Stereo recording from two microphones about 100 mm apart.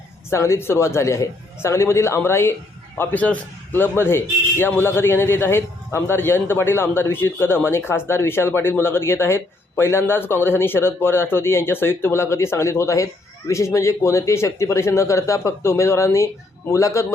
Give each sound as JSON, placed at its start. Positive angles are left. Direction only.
{"t": 0.3, "sound": "a man's voice", "side_deg": 30}